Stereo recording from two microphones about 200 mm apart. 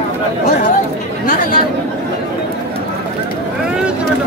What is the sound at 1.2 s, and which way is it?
Speech, 45° left (ahead or behind).